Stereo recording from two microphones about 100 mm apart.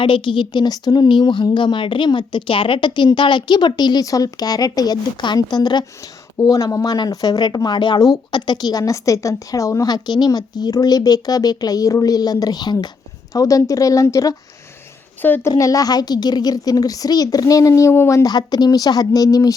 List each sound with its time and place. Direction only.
0.0 s a woman's voice: 55° left (ahead or behind)
8.8 s a woman's voice: 30° left (ahead or behind)
15.4 s a woman's voice: 30° left (ahead or behind)